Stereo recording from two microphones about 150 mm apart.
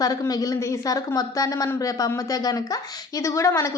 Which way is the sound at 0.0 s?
25° left (ahead or behind).